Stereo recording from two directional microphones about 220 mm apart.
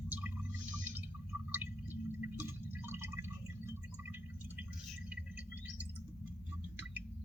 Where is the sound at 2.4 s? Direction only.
10° right (ahead or behind).